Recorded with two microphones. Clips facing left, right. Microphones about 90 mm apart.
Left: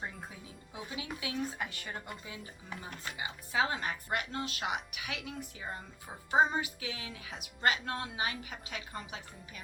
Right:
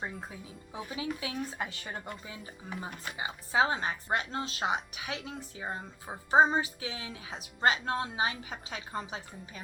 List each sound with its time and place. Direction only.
0.7 s speech: 30° right (ahead or behind)
3.2 s speech: 30° right (ahead or behind)